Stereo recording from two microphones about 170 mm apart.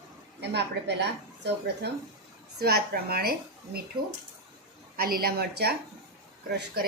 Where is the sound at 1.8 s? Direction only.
80° right.